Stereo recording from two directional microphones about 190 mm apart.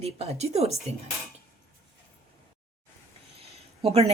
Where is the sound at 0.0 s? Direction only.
35° right (ahead or behind).